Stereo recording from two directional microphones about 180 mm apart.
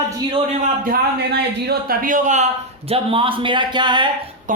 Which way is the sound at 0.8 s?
60° right (ahead or behind).